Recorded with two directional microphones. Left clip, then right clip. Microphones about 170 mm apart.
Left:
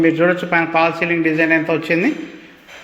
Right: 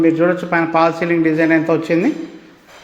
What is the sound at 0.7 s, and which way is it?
A man's voice, 15° right (ahead or behind).